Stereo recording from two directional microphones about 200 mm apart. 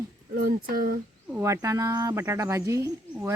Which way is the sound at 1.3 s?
10° right (ahead or behind).